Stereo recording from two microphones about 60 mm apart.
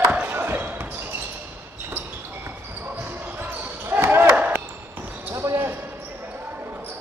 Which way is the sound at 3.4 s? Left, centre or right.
Right.